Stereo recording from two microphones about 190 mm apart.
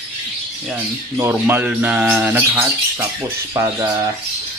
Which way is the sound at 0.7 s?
10° right (ahead or behind).